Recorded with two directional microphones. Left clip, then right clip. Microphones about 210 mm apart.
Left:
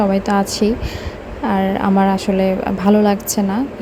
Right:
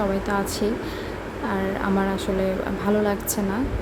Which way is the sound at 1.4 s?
30° left (ahead or behind).